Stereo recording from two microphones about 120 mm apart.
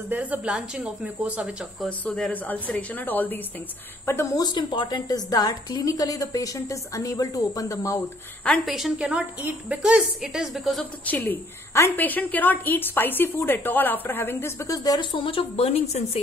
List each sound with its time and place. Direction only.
0.1 s speech: 15° right (ahead or behind)
1.9 s a woman's voice: 10° left (ahead or behind); by 4.5 s 25° left (ahead or behind)
4.5 s a woman's voice: 40° left (ahead or behind)
8.6 s a woman's voice: centre (ahead or behind)
11.1 s a woman's voice: 15° left (ahead or behind)
14.8 s speech: 40° left (ahead or behind); by 16.2 s 60° left (ahead or behind)